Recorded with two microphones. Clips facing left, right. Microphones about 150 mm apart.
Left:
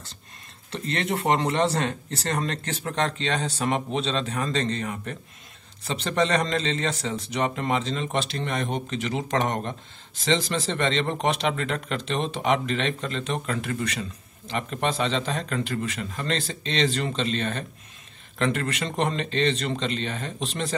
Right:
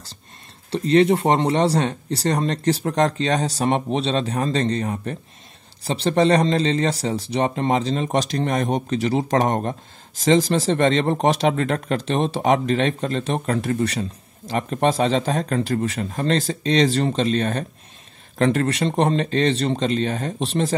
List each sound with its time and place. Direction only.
0.7 s speech: 35° right (ahead or behind)